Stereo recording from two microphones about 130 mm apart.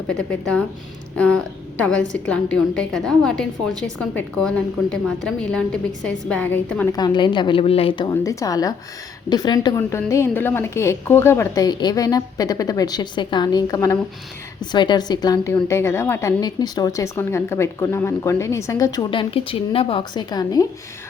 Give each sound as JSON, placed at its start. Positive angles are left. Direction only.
{"t": 0.1, "sound": "a woman's voice", "side_deg": 5}
{"t": 6.9, "sound": "a woman's voice", "side_deg": 35}
{"t": 8.1, "sound": "a woman's voice", "side_deg": 25}
{"t": 9.7, "sound": "a woman's voice", "side_deg": 20}
{"t": 14.6, "sound": "a woman's voice", "side_deg": 35}
{"t": 16.4, "sound": "a woman's voice", "side_deg": 30}